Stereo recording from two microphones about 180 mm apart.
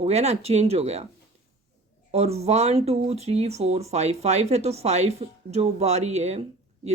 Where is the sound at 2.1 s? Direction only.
35° right (ahead or behind).